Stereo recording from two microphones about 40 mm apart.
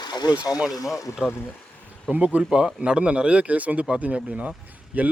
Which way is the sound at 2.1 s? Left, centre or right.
Right.